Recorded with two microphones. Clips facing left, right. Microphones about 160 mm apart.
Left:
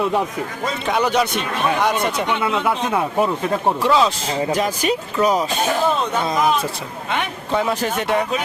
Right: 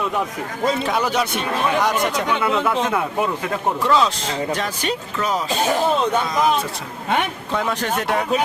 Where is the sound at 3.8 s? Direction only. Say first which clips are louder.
Right 1 dB; 5° left (ahead or behind).